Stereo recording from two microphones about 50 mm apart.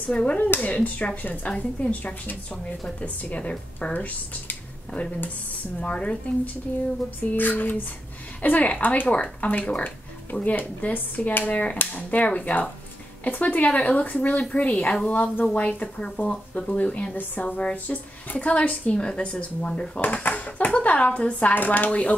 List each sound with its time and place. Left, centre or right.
0.1 s speech: left
5.8 s speech: left
7.3 s speech: left; by 19.9 s centre
20.0 s speech: left